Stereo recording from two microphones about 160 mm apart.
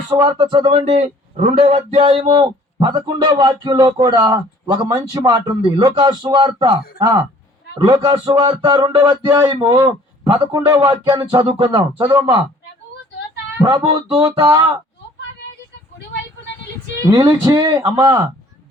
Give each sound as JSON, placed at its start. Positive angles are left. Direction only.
{"t": 0.1, "sound": "a man's voice", "side_deg": -30}
{"t": 13.7, "sound": "a man's voice", "side_deg": -30}
{"t": 17.1, "sound": "a man's voice", "side_deg": -25}